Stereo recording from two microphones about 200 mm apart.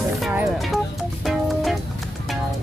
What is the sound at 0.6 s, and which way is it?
Speech, centre (ahead or behind).